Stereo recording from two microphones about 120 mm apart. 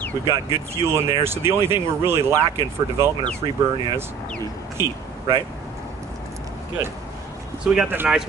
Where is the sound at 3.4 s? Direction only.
40° right (ahead or behind).